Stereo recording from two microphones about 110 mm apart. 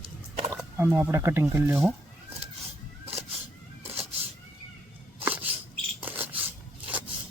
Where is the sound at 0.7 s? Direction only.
20° right (ahead or behind).